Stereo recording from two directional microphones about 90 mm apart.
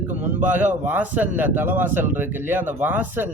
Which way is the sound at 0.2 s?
20° right (ahead or behind).